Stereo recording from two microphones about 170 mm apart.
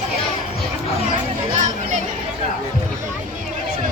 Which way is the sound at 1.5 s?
45° right (ahead or behind).